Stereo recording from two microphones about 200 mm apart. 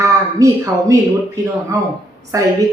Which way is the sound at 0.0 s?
15° right (ahead or behind).